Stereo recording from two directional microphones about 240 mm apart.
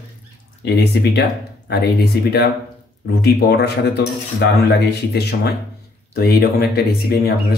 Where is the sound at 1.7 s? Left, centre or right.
Left.